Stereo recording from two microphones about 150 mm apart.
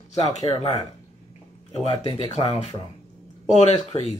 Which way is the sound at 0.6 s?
45° left (ahead or behind).